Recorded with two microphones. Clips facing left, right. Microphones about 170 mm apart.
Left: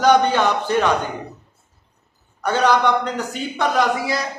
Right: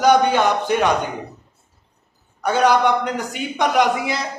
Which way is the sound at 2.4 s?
10° right (ahead or behind).